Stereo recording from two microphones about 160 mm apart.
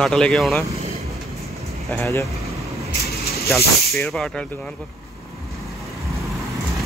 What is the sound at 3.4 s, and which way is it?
Speech, centre (ahead or behind).